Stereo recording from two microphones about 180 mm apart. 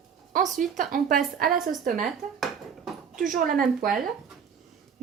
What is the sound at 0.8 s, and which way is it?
Speech, 50° right (ahead or behind).